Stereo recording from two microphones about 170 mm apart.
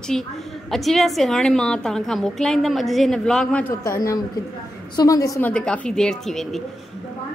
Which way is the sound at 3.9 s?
20° left (ahead or behind).